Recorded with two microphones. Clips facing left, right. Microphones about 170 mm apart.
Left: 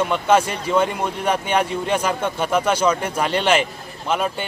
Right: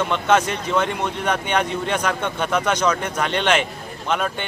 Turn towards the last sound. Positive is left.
turn(degrees=5)  # may be behind; listen again after turning